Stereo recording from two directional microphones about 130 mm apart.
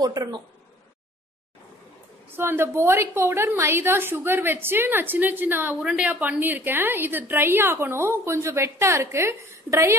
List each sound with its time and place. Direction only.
0.0 s speech: 30° right (ahead or behind)
2.3 s a woman's voice: 20° right (ahead or behind)